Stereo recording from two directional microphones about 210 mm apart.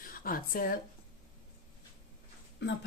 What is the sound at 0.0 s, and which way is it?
Speech, 45° left (ahead or behind).